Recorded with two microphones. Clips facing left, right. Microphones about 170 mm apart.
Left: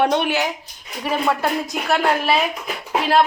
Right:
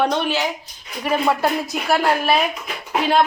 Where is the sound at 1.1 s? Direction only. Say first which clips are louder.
Right 2 dB; centre (ahead or behind).